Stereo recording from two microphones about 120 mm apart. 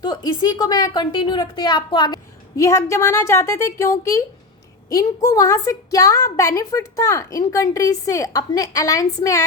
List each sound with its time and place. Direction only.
0.0 s a woman's voice: 35° left (ahead or behind)
2.6 s a woman's voice: 25° left (ahead or behind)